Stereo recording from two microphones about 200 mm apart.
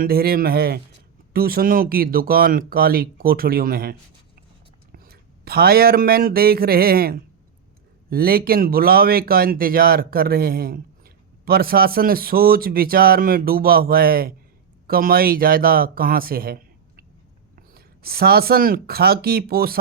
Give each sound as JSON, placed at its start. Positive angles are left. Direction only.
{"t": 0.0, "sound": "speech", "side_deg": -50}
{"t": 5.0, "sound": "speech", "side_deg": -50}
{"t": 17.7, "sound": "speech", "side_deg": -50}